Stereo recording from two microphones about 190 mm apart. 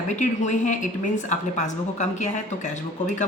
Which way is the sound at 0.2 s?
40° left (ahead or behind).